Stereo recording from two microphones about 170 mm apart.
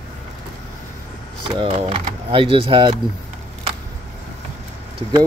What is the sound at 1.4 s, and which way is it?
Speech, 30° right (ahead or behind).